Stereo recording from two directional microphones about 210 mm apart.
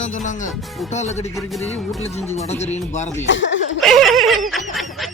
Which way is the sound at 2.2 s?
30° left (ahead or behind).